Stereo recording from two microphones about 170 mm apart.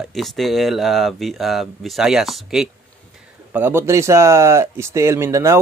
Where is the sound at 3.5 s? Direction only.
15° right (ahead or behind).